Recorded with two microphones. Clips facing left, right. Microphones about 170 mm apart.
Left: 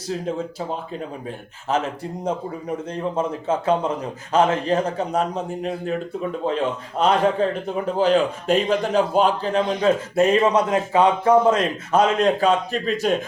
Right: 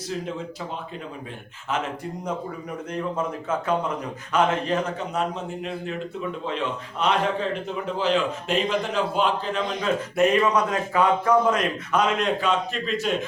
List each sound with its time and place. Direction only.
1.7 s a man's voice: 35° left (ahead or behind)